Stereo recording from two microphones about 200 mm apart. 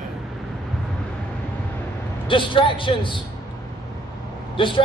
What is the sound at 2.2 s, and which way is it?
Speech, 25° left (ahead or behind).